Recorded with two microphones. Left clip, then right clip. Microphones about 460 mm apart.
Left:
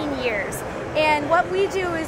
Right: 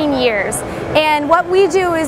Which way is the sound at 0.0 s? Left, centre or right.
Right.